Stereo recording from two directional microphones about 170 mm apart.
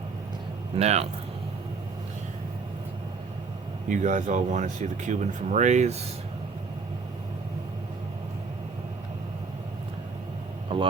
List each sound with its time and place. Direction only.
0.8 s speech: 40° right (ahead or behind)
3.8 s speech: 50° right (ahead or behind)